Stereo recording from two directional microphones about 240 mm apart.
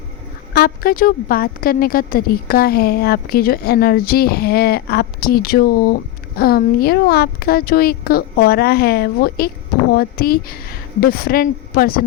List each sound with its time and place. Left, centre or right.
0.5 s a woman's voice: left